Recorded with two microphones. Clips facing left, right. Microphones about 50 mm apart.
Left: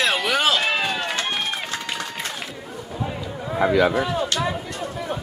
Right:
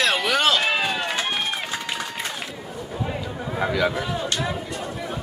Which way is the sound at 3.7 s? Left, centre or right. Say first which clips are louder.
Left 5 dB; centre.